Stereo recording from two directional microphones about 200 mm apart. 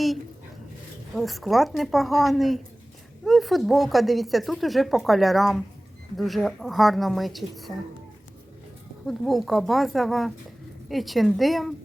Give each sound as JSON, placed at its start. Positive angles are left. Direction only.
{"t": 1.1, "sound": "speech", "side_deg": 0}
{"t": 9.0, "sound": "speech", "side_deg": 0}